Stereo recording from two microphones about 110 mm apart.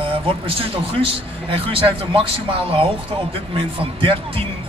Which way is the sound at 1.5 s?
55° right (ahead or behind).